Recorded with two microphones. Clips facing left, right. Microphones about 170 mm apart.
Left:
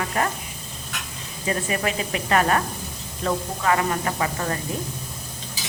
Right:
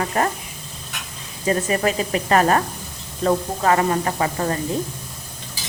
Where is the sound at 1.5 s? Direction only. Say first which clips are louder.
Right 5 dB; 35° right (ahead or behind).